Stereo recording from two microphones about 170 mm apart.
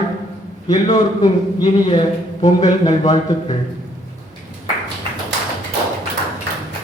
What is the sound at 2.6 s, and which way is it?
Speech, 40° left (ahead or behind).